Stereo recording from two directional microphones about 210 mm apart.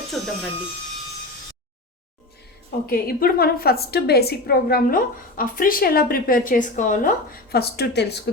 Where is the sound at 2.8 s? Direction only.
45° left (ahead or behind).